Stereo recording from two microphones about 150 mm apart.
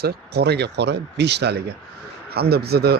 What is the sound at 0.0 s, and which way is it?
A man's voice, 90° right.